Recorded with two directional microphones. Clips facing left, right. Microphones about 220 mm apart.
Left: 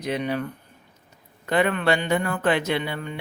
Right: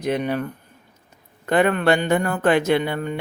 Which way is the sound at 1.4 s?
50° right (ahead or behind).